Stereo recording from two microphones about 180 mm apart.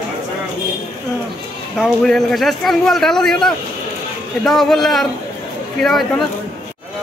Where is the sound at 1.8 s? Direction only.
Centre (ahead or behind).